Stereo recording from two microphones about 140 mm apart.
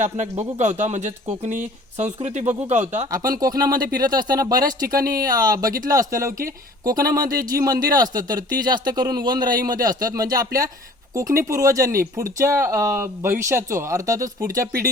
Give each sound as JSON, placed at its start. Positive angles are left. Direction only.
{"t": 0.0, "sound": "speech", "side_deg": -60}
{"t": 3.4, "sound": "a man's voice", "side_deg": -25}
{"t": 4.9, "sound": "speech", "side_deg": -90}
{"t": 5.2, "sound": "a man's voice", "side_deg": -25}
{"t": 7.4, "sound": "a man's voice", "side_deg": -25}